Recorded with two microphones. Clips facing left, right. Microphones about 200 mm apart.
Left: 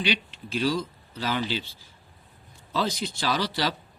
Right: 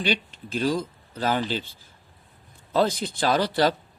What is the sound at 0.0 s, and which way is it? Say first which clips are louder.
Speech: right 2 dB; 50° right (ahead or behind).